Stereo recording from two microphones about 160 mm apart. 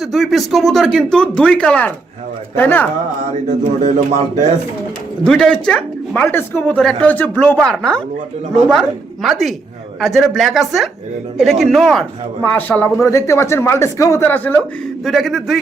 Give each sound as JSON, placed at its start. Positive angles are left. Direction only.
{"t": 0.0, "sound": "speech", "side_deg": 0}
{"t": 3.8, "sound": "speech", "side_deg": -50}
{"t": 5.2, "sound": "speech", "side_deg": 5}
{"t": 15.0, "sound": "speech", "side_deg": 0}